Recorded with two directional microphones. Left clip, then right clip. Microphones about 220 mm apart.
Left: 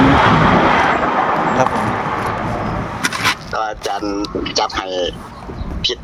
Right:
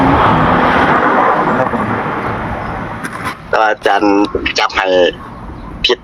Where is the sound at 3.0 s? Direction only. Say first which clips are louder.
Left 4 dB; 50° left (ahead or behind).